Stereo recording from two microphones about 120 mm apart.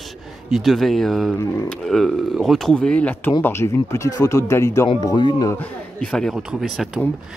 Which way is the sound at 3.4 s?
20° left (ahead or behind).